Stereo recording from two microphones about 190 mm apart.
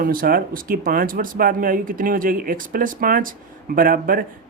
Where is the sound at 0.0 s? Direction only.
50° right (ahead or behind).